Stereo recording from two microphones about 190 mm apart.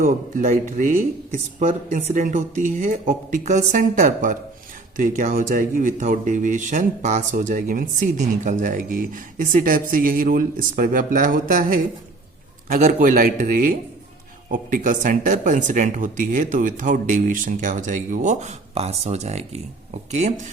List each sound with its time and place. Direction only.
0.0 s speech: 45° right (ahead or behind)